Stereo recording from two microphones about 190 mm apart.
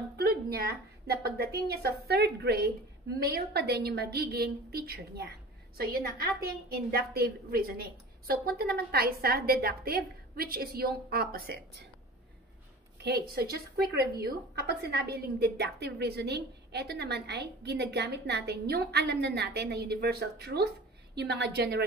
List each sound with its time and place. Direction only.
0.2 s a woman's voice: 55° right (ahead or behind)
13.0 s a woman's voice: 60° right (ahead or behind)